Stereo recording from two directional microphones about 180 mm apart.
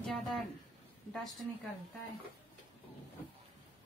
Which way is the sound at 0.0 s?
Centre (ahead or behind).